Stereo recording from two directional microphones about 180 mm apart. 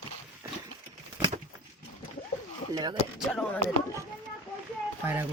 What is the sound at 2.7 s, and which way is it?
Speech, 20° right (ahead or behind).